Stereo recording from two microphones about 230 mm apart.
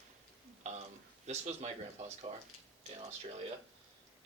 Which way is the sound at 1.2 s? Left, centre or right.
Right.